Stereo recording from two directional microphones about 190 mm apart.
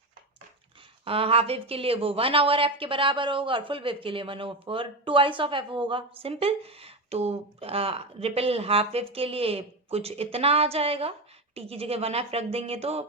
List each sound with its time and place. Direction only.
1.0 s a woman's voice: 30° right (ahead or behind)